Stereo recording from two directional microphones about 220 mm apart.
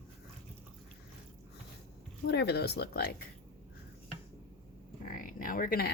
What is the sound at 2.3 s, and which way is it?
Speech, 50° left (ahead or behind).